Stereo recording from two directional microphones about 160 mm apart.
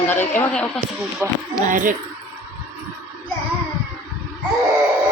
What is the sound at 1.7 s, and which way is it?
Speech, 55° right (ahead or behind).